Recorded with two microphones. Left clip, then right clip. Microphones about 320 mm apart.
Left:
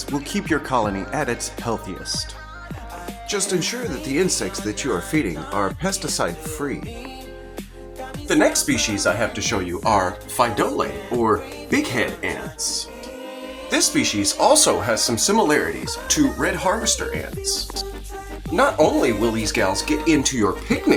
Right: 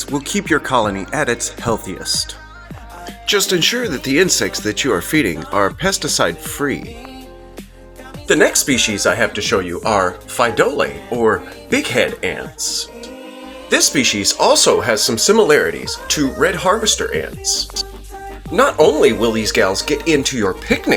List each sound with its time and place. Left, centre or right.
0.1 s speech: left
3.2 s speech: left
8.3 s speech: left